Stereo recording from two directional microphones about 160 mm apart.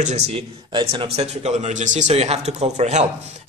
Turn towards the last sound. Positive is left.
turn(degrees=-45)  # may be behind; listen again after turning